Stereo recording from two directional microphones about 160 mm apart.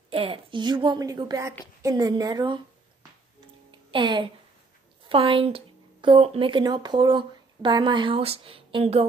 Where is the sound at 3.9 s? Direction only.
30° right (ahead or behind).